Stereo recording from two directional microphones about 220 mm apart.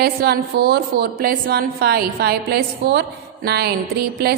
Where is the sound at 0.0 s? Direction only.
45° right (ahead or behind).